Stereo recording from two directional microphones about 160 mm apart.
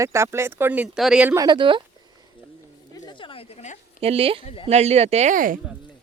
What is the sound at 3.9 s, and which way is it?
Speech, 35° right (ahead or behind).